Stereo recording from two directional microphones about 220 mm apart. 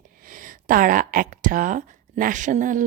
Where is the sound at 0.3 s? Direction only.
40° right (ahead or behind).